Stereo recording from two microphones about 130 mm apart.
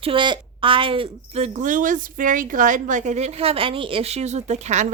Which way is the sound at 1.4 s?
75° right (ahead or behind).